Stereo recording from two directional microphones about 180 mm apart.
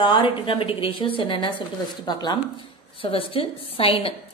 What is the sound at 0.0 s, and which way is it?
A woman's voice, 30° left (ahead or behind).